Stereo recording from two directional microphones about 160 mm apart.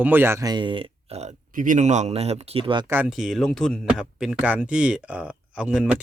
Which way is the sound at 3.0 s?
Centre (ahead or behind).